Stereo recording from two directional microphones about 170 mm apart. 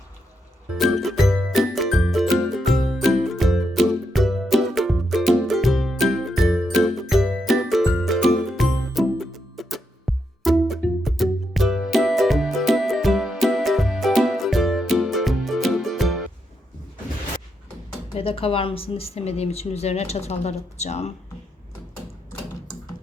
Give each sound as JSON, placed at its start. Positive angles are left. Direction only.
{"t": 0.8, "sound": "music", "side_deg": 0}
{"t": 18.1, "sound": "speech", "side_deg": 35}